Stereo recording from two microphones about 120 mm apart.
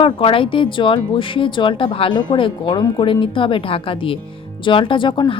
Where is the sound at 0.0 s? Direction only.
45° left (ahead or behind).